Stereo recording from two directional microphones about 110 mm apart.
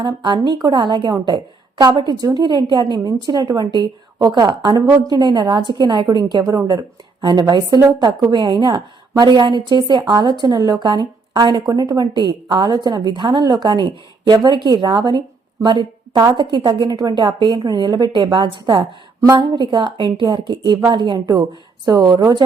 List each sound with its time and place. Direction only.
0.0 s a woman's voice: 45° right (ahead or behind)